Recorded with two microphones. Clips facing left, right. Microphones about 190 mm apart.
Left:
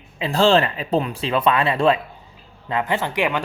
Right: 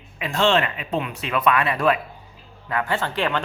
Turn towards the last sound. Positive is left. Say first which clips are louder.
# left 2 dB
turn(degrees=15)  # may be behind; listen again after turning